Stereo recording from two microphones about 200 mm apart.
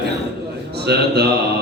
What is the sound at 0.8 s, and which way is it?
Speech, 55° right (ahead or behind).